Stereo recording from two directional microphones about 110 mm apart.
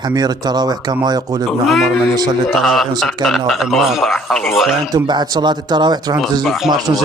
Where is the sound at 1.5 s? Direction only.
Centre (ahead or behind).